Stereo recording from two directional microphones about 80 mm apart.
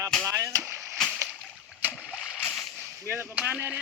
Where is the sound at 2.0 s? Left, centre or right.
Centre.